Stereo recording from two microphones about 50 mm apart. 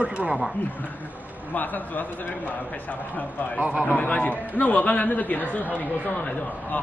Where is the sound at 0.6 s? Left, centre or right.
Left.